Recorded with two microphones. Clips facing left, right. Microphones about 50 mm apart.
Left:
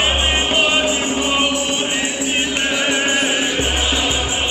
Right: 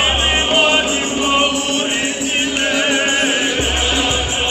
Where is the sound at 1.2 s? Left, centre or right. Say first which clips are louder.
Right 4 dB; centre.